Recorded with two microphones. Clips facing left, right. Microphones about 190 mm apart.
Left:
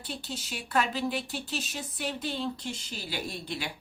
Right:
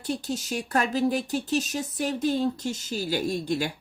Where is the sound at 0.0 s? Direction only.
45° right (ahead or behind).